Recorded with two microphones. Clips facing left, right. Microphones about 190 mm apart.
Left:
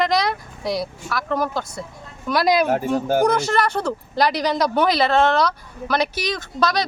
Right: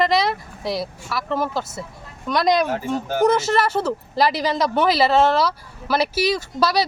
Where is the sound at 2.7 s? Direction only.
45° left (ahead or behind).